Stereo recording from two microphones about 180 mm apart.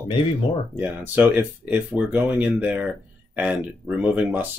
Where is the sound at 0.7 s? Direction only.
10° right (ahead or behind).